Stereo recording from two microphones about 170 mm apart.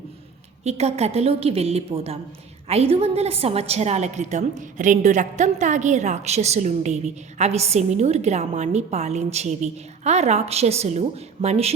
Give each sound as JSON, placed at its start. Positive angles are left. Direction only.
{"t": 0.6, "sound": "a woman's voice", "side_deg": -40}